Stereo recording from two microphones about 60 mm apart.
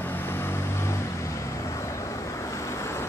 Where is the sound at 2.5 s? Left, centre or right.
Left.